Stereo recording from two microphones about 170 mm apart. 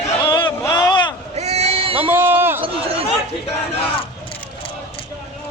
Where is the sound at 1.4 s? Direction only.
40° right (ahead or behind).